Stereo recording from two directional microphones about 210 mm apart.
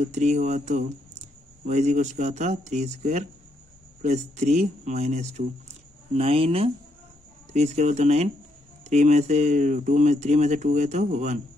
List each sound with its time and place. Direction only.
0.0 s speech: 35° right (ahead or behind)